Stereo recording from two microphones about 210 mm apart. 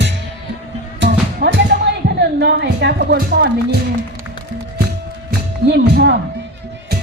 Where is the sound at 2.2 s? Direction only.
50° right (ahead or behind).